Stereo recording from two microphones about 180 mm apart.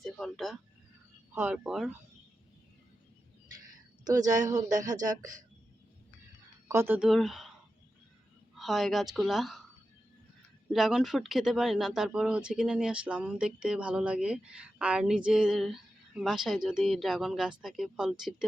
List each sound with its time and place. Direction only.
0.0 s a sound: centre (ahead or behind)
1.4 s speech: 5° right (ahead or behind)
4.0 s speech: 20° right (ahead or behind)
6.7 s speech: 15° right (ahead or behind)
7.1 s speech: centre (ahead or behind)
8.5 s speech: centre (ahead or behind)
10.7 s speech: centre (ahead or behind)